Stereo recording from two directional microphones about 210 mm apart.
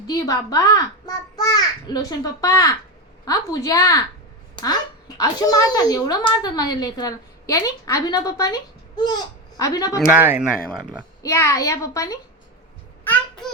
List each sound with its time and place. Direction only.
0.1 s speech: 15° left (ahead or behind)
10.1 s speech: 10° right (ahead or behind)
10.7 s speech: 5° left (ahead or behind)
13.1 s a sound: 5° left (ahead or behind)